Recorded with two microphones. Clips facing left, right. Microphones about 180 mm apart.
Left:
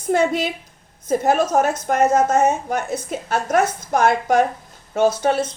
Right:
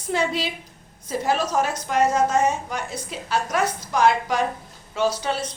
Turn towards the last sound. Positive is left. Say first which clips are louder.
# left 6 dB
turn(degrees=50)  # may be behind; listen again after turning